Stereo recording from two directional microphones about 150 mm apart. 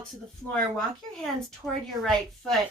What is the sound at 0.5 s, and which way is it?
Speech, 5° left (ahead or behind).